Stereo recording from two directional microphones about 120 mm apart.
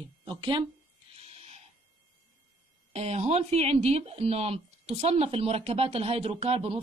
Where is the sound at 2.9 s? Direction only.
65° right (ahead or behind).